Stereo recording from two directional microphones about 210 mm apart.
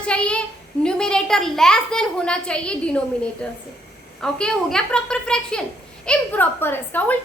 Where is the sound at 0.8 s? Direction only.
5° left (ahead or behind).